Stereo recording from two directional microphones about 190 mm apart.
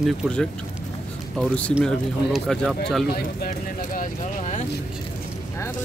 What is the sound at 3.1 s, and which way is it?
Speech, 50° left (ahead or behind).